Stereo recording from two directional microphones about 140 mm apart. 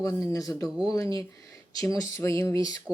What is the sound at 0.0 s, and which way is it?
Speech, 25° left (ahead or behind).